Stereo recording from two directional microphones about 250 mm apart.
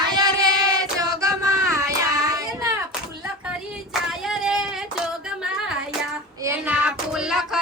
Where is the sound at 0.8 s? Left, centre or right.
Centre.